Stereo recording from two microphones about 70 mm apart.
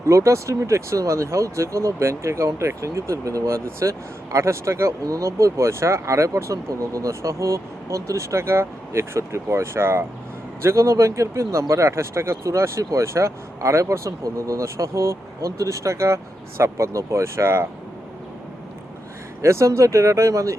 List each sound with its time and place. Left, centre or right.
0.1 s speech: right
19.4 s speech: right